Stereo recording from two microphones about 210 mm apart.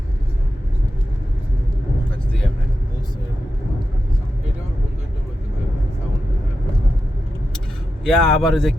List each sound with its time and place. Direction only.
8.0 s a man's voice: 5° left (ahead or behind)